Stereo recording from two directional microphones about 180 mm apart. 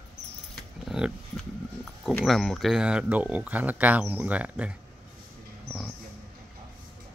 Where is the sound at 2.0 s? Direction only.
Centre (ahead or behind).